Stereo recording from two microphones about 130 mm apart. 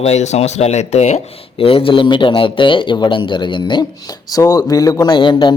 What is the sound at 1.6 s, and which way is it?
Speech, 45° left (ahead or behind).